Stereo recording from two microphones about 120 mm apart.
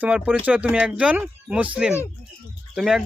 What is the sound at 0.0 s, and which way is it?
Speech, 10° right (ahead or behind).